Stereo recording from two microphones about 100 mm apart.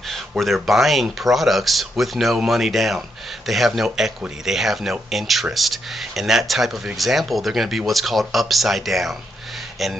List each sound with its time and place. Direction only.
0.4 s speech: centre (ahead or behind)